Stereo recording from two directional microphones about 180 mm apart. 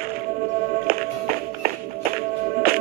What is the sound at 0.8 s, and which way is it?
Music, 55° right (ahead or behind).